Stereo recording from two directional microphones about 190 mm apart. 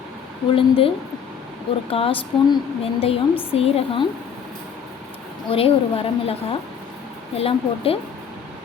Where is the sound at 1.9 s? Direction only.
30° left (ahead or behind).